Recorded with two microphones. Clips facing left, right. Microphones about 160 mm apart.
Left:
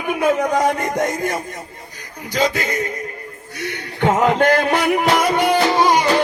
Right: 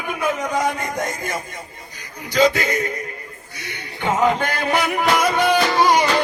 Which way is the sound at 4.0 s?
65° left (ahead or behind).